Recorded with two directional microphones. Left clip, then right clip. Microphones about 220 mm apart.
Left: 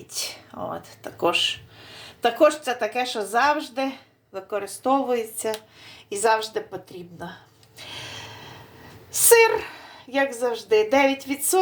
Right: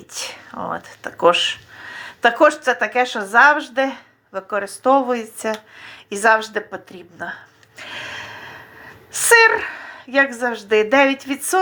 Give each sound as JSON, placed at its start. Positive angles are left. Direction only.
{"t": 0.1, "sound": "a woman's voice", "side_deg": -15}
{"t": 7.8, "sound": "gasp", "side_deg": -15}
{"t": 9.1, "sound": "a woman's voice", "side_deg": -15}